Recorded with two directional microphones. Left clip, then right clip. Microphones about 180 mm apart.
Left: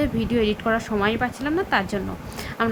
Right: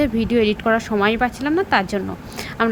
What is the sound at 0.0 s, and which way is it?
Speech, 25° right (ahead or behind).